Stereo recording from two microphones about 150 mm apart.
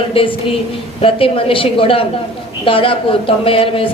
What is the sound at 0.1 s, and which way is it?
Speech, 35° left (ahead or behind).